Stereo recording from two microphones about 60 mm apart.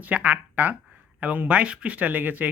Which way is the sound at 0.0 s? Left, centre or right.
Right.